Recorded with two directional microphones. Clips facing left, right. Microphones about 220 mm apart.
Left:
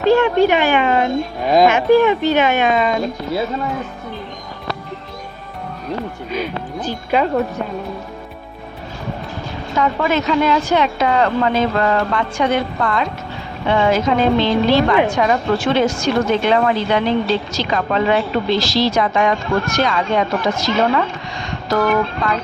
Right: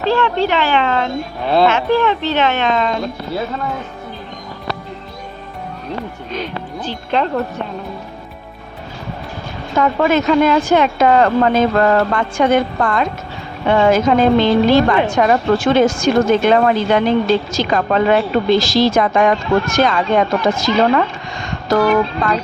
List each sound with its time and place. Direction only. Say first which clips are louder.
0.2 s speech: left 3 dB; 15° left (ahead or behind)
6.3 s speech: left 1 dB; 10° left (ahead or behind)
9.7 s speech: right 3 dB; 50° right (ahead or behind)
22.2 s speech: right 2 dB; 50° right (ahead or behind)